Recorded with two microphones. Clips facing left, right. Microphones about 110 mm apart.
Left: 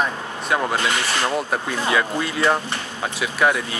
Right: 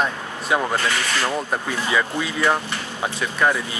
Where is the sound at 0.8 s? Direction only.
20° left (ahead or behind).